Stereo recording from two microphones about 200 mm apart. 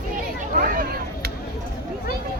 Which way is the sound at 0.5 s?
45° right (ahead or behind).